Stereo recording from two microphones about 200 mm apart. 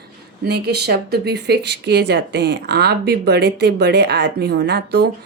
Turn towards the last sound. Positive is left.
turn(degrees=-55)  # may be behind; listen again after turning